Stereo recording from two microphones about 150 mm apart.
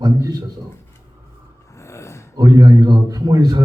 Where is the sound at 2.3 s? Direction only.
25° right (ahead or behind).